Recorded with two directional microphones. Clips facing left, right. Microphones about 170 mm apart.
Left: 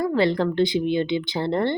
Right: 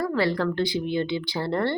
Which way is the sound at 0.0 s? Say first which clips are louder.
Left 3 dB; 20° left (ahead or behind).